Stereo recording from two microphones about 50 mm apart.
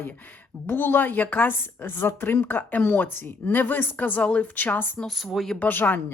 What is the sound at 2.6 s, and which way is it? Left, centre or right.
A woman's voice, left.